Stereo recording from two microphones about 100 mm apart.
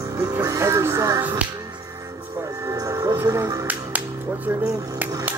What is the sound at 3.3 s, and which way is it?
Speech, 35° right (ahead or behind).